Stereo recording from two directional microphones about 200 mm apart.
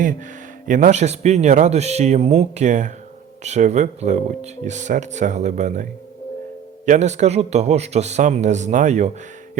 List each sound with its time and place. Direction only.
0.6 s speech: 40° right (ahead or behind)
6.8 s speech: 35° right (ahead or behind)